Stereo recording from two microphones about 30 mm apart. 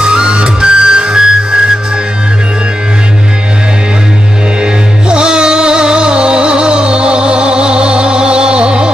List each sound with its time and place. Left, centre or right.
0.0 s music: right
5.1 s music: right